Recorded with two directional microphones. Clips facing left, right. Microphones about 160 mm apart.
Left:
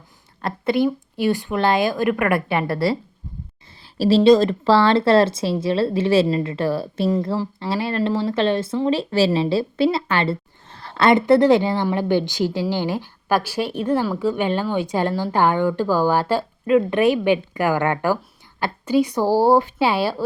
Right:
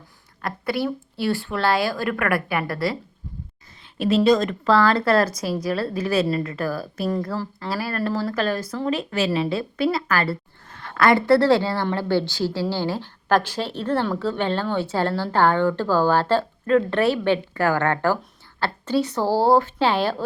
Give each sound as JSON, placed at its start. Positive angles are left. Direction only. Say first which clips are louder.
{"t": 0.4, "sound": "a woman's voice", "louder": "left 5 dB", "side_deg": 20}